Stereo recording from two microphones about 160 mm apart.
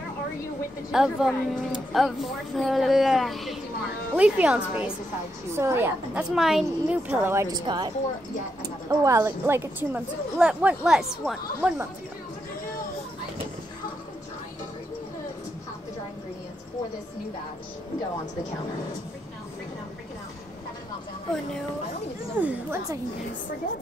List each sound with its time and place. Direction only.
0.9 s a woman's voice: 5° right (ahead or behind)
6.3 s a woman's voice: centre (ahead or behind)
7.6 s a woman's voice: 25° right (ahead or behind); by 11.7 s centre (ahead or behind)
22.4 s a woman's voice: 15° right (ahead or behind)